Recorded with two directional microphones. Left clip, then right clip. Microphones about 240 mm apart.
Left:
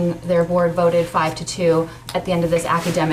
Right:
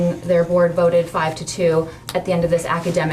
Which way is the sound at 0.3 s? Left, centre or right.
Left.